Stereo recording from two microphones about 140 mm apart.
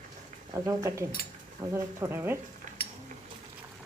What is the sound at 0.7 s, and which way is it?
Speech, 20° right (ahead or behind).